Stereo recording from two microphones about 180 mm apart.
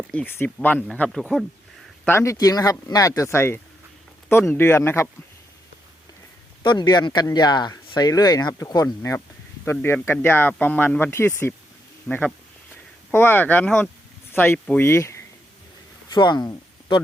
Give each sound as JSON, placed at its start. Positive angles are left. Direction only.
{"t": 0.1, "sound": "speech", "side_deg": 5}
{"t": 2.0, "sound": "speech", "side_deg": 15}
{"t": 6.6, "sound": "speech", "side_deg": 25}